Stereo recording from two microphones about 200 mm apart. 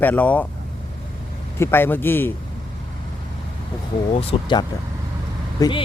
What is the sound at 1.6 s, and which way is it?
Speech, 10° left (ahead or behind).